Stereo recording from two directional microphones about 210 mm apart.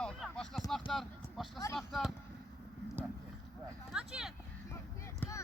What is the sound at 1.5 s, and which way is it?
Speech, 15° left (ahead or behind).